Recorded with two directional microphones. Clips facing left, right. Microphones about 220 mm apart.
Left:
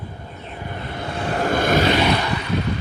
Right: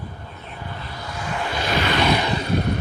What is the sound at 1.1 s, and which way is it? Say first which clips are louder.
Vehicle: left 7 dB; 35° left (ahead or behind).